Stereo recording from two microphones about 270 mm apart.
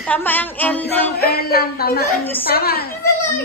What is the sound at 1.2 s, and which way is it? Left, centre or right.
Speech, left.